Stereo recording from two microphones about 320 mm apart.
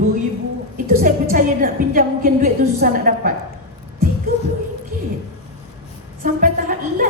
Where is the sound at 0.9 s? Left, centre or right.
Right.